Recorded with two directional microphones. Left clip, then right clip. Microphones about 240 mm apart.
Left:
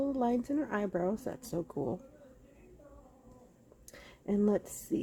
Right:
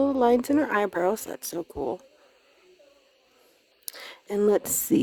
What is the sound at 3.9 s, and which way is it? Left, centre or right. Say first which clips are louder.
Speech: right 7 dB; right.